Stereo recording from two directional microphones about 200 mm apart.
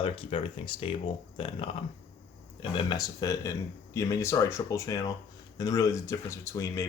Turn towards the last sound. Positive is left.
turn(degrees=15)  # may be behind; listen again after turning